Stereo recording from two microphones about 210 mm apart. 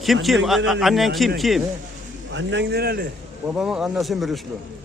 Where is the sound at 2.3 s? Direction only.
60° right (ahead or behind).